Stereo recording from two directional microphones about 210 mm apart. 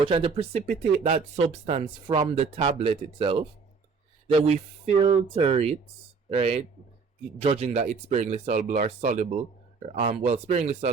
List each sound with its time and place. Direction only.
0.0 s speech: 25° right (ahead or behind)